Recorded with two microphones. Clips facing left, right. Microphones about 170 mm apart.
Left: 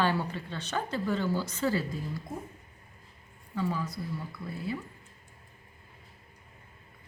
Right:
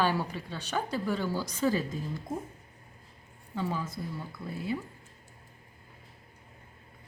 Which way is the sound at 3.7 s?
25° right (ahead or behind).